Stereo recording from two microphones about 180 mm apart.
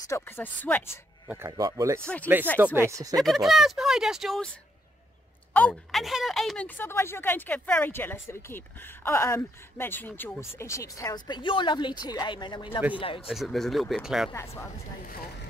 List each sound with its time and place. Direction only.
0.1 s speech: 10° left (ahead or behind)
1.3 s speech: 15° right (ahead or behind)
3.2 s speech: centre (ahead or behind)
5.5 s speech: 10° left (ahead or behind); by 13.3 s 30° left (ahead or behind)
13.3 s speech: centre (ahead or behind)
14.3 s speech: 15° left (ahead or behind)
15.0 s speech: 50° left (ahead or behind)